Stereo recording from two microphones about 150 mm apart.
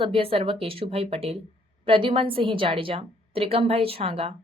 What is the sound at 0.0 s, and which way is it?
A woman's voice, 35° right (ahead or behind).